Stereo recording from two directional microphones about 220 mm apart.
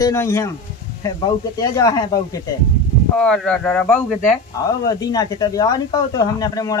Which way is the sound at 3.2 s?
5° left (ahead or behind).